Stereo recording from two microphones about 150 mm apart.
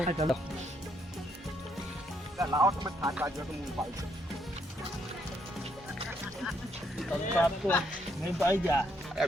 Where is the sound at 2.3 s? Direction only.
20° right (ahead or behind).